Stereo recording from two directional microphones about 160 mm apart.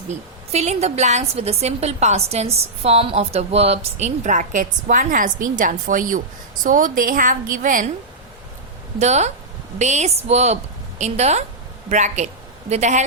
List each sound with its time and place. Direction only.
0.5 s a woman's voice: 45° right (ahead or behind)
9.0 s a woman's voice: 45° right (ahead or behind)